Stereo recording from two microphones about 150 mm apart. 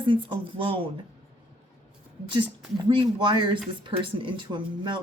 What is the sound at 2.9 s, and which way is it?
A woman's voice, 30° right (ahead or behind).